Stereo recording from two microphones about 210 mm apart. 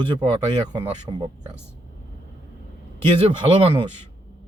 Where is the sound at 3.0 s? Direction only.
25° right (ahead or behind).